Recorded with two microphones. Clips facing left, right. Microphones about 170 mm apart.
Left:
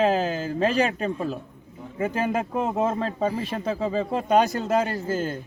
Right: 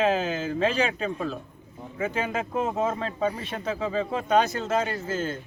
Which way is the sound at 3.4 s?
35° left (ahead or behind).